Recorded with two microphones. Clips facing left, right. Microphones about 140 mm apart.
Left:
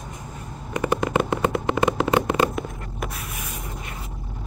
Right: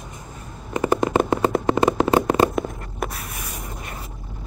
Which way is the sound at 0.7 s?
35° right (ahead or behind).